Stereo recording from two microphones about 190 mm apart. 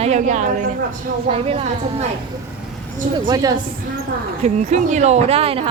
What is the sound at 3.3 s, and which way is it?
Speech, 20° right (ahead or behind).